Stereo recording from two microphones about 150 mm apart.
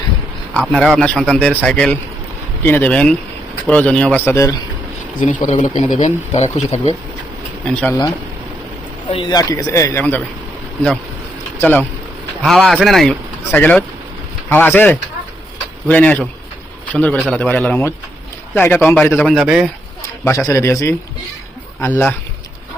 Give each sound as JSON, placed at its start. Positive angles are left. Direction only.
{"t": 0.5, "sound": "a man's voice", "side_deg": 5}
{"t": 5.4, "sound": "speech", "side_deg": 55}
{"t": 7.6, "sound": "speech", "side_deg": 5}
{"t": 9.0, "sound": "speech", "side_deg": 35}
{"t": 11.6, "sound": "a man's voice", "side_deg": 10}
{"t": 19.1, "sound": "speech", "side_deg": 0}
{"t": 20.0, "sound": "bird", "side_deg": 20}
{"t": 20.5, "sound": "a man's voice", "side_deg": 20}